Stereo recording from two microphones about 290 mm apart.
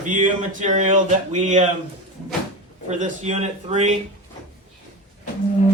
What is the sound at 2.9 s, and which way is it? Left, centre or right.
A man's voice, right.